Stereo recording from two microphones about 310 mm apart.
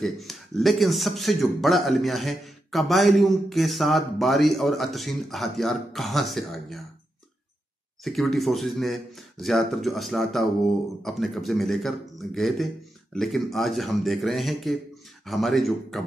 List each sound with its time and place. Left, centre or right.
0.0 s a man's voice: centre
8.0 s a man's voice: centre